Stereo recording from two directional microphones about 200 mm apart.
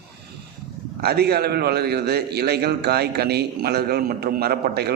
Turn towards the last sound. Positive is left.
turn(degrees=-50)  # may be behind; listen again after turning